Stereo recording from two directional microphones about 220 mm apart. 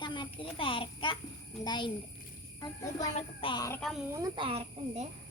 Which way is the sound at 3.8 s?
Centre (ahead or behind).